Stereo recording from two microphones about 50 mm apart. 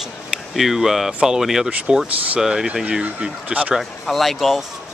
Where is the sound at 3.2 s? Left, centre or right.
Right.